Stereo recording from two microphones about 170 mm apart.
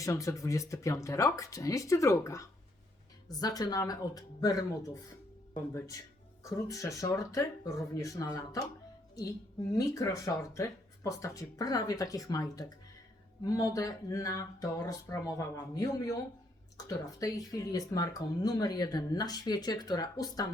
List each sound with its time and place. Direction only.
0.0 s speech: 20° left (ahead or behind)